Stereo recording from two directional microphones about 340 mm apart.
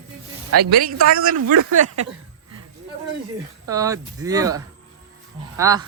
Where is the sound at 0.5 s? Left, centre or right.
Right.